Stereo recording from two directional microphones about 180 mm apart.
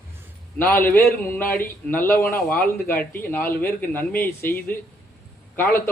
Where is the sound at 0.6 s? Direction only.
10° left (ahead or behind).